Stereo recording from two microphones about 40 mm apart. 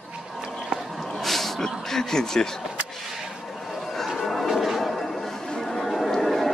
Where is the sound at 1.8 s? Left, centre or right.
Centre.